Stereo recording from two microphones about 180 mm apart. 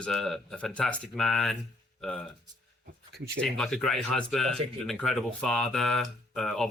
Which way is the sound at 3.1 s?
65° right (ahead or behind).